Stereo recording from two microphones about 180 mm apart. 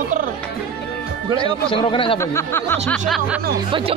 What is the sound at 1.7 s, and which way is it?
Speech, 30° left (ahead or behind).